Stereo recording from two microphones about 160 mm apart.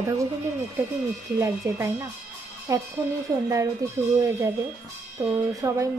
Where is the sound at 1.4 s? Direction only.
15° right (ahead or behind).